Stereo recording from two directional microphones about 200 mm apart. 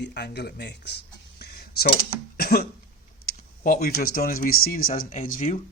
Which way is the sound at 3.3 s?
45° left (ahead or behind).